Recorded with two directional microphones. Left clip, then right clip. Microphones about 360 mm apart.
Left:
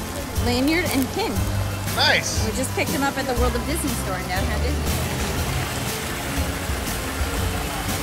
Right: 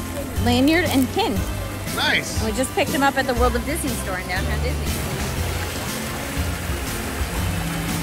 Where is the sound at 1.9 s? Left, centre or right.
Centre.